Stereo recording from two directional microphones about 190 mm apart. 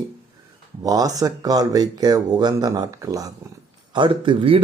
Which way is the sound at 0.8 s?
20° right (ahead or behind).